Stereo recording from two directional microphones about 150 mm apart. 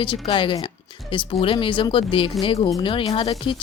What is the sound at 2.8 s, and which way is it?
Speech, 35° left (ahead or behind).